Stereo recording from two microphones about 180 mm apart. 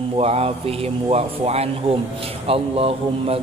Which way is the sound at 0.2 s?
35° right (ahead or behind).